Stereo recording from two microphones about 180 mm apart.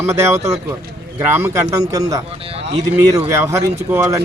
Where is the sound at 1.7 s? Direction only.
20° right (ahead or behind).